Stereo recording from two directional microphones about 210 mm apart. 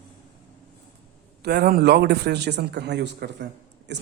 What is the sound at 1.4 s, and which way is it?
A man's voice, 50° right (ahead or behind).